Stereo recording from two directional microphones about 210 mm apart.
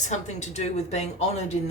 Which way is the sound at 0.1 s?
35° left (ahead or behind).